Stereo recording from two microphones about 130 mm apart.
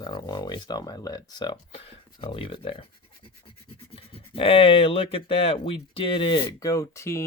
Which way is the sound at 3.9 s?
45° left (ahead or behind).